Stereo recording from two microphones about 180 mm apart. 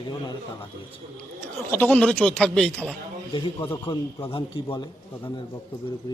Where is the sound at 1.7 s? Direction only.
10° left (ahead or behind).